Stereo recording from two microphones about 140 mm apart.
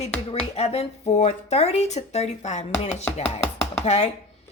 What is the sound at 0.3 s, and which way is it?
Speech, 45° left (ahead or behind).